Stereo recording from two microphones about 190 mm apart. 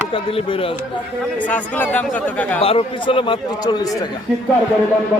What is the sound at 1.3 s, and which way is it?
Speech, 10° left (ahead or behind).